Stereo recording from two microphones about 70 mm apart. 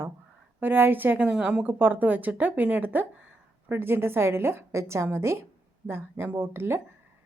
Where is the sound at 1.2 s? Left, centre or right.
Centre.